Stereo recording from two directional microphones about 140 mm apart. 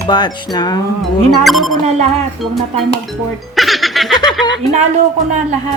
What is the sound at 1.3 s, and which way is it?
Speech, centre (ahead or behind).